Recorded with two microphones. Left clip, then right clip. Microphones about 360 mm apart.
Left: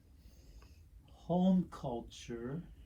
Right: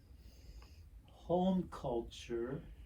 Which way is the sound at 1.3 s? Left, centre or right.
Centre.